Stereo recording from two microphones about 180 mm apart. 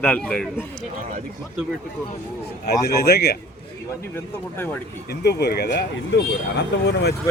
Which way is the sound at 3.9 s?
10° left (ahead or behind).